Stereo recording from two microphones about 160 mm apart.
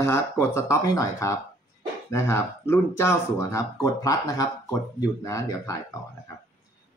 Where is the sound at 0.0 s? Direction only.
15° left (ahead or behind).